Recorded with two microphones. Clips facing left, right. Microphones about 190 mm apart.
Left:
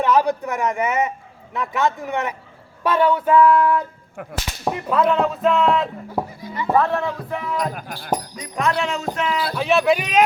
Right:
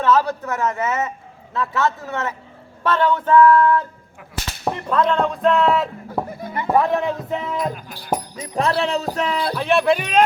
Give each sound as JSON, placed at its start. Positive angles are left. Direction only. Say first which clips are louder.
{"t": 0.0, "sound": "a man's voice", "louder": "even", "side_deg": 15}
{"t": 6.4, "sound": "music", "louder": "right 1 dB", "side_deg": -55}
{"t": 6.7, "sound": "speech", "louder": "right 1 dB", "side_deg": -15}
{"t": 9.6, "sound": "speech", "louder": "even", "side_deg": 0}